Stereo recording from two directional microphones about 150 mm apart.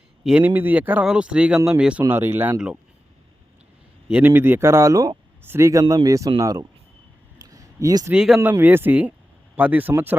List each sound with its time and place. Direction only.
0.3 s speech: 10° right (ahead or behind)
4.3 s speech: 15° right (ahead or behind)
7.3 s a sound: 25° right (ahead or behind)
8.1 s speech: 5° right (ahead or behind)
8.4 s speech: 15° right (ahead or behind)